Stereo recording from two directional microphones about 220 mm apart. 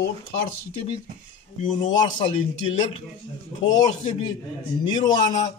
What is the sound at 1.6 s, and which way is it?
Speech, 35° left (ahead or behind).